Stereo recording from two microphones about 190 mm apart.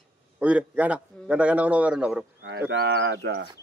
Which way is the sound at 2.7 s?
65° right (ahead or behind).